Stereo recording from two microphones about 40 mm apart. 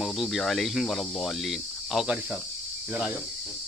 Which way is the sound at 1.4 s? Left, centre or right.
Centre.